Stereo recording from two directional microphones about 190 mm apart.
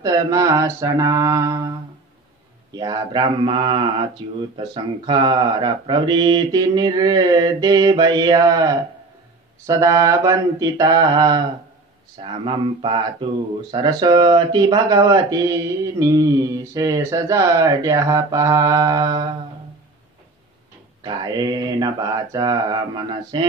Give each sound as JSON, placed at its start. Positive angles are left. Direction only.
{"t": 0.0, "sound": "mantra", "side_deg": -20}
{"t": 2.7, "sound": "speech", "side_deg": -20}
{"t": 9.7, "sound": "mantra", "side_deg": -15}
{"t": 12.2, "sound": "speech", "side_deg": -30}
{"t": 21.0, "sound": "speech", "side_deg": -20}